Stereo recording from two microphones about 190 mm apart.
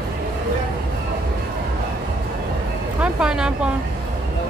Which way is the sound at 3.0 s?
5° right (ahead or behind).